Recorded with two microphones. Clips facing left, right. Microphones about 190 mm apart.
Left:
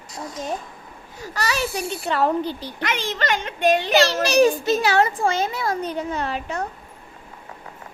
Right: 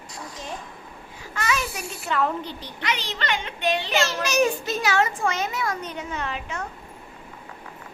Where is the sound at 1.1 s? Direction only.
40° left (ahead or behind).